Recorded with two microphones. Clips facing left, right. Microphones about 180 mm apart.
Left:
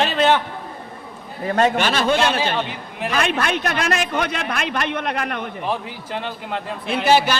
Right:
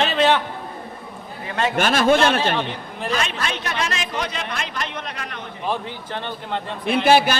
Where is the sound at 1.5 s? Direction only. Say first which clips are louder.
Left 6 dB; 40° left (ahead or behind).